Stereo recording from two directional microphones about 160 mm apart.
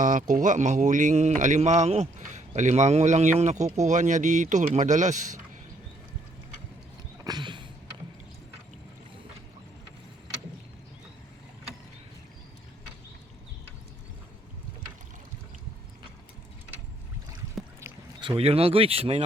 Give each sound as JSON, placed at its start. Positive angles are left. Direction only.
{"t": 0.0, "sound": "speech", "side_deg": -55}
{"t": 7.3, "sound": "a sound", "side_deg": -30}
{"t": 18.2, "sound": "speech", "side_deg": -35}